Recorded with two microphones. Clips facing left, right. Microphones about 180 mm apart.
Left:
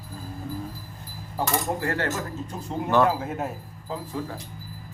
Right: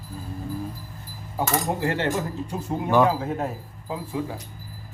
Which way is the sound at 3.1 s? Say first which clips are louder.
Right 2 dB; 5° left (ahead or behind).